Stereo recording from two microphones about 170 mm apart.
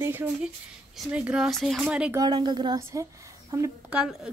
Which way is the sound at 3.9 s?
5° right (ahead or behind).